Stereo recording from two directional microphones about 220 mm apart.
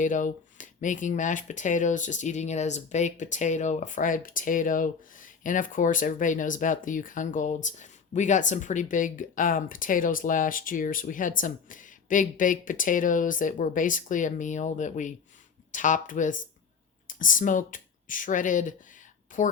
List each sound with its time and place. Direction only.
0.0 s speech: 35° left (ahead or behind)